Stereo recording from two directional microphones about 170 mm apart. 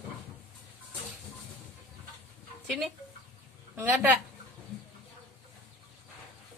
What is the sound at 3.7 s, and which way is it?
Speech, 10° right (ahead or behind).